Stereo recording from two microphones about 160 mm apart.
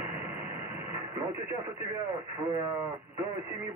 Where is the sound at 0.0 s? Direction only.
15° right (ahead or behind).